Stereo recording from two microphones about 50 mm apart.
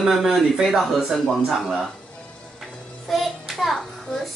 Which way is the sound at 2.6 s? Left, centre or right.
Centre.